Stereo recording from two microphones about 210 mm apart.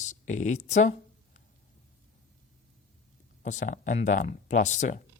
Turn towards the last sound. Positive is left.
turn(degrees=35)  # may be behind; listen again after turning